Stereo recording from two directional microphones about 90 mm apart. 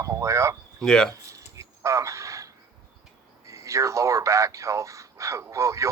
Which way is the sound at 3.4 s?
35° right (ahead or behind).